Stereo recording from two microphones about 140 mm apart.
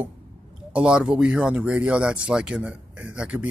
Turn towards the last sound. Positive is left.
turn(degrees=-5)  # may be behind; listen again after turning